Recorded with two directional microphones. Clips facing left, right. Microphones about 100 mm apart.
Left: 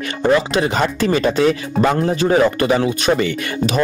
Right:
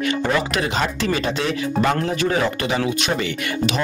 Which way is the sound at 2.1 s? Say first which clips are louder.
Left 6 dB; 30° left (ahead or behind).